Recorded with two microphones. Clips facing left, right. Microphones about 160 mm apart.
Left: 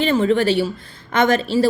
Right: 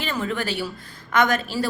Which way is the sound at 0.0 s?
30° left (ahead or behind).